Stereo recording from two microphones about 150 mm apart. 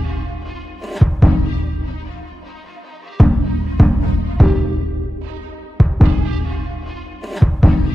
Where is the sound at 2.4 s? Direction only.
Centre (ahead or behind).